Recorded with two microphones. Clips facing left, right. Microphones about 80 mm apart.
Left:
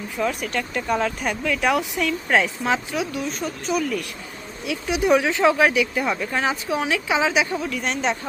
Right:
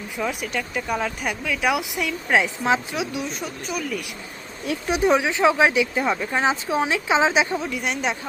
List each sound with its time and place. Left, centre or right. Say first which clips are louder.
0.2 s speech: left 2 dB; centre
3.7 s speech: left 5 dB; centre
4.6 s speech: right 1 dB; right
5.0 s speech: left 1 dB; centre
7.6 s speech: left 1 dB; centre